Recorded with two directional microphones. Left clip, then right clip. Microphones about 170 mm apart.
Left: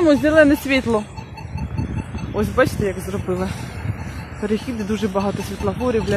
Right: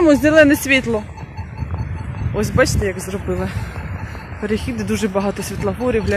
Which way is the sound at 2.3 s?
10° right (ahead or behind).